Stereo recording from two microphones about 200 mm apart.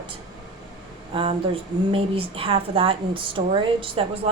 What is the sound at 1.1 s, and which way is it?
Speech, 30° right (ahead or behind).